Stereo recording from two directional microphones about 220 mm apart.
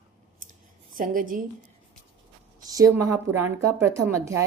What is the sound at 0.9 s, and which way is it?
Speech, 40° right (ahead or behind).